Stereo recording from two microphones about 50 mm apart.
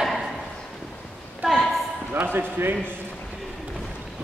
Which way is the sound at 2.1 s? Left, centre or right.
Right.